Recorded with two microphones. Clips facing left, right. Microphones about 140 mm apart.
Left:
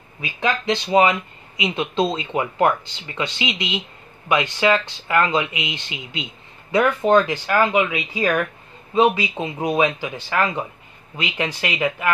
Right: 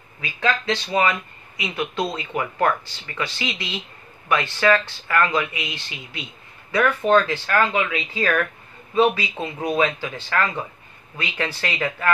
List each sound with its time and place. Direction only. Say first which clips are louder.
0.2 s speech: left 1 dB; 20° left (ahead or behind)